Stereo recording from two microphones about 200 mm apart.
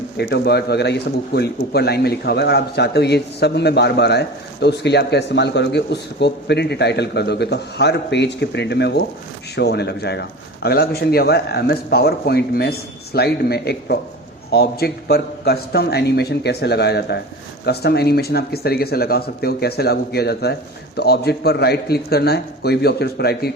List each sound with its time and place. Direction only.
0.2 s a man's voice: 55° left (ahead or behind)